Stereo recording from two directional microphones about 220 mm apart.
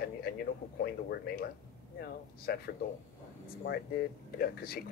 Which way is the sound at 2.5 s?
45° left (ahead or behind).